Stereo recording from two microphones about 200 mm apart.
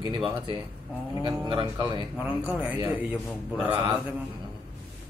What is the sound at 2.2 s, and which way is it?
A man's voice, 5° right (ahead or behind).